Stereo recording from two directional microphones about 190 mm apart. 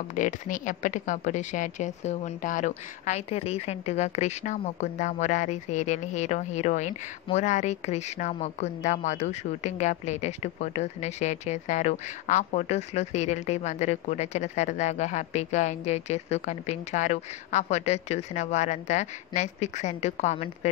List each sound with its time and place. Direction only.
0.1 s speech: 45° left (ahead or behind)